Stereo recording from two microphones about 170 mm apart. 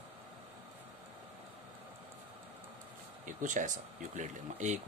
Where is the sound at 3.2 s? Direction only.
50° right (ahead or behind).